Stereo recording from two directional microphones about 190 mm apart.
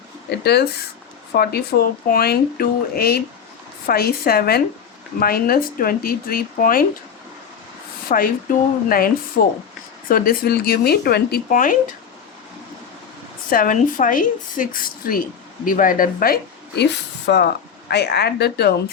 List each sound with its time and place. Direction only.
0.3 s a woman's voice: 60° left (ahead or behind)
8.1 s a woman's voice: 50° left (ahead or behind)
13.5 s a woman's voice: 45° left (ahead or behind)